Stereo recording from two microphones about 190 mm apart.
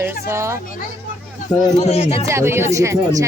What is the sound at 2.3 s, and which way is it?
Speech, 15° right (ahead or behind).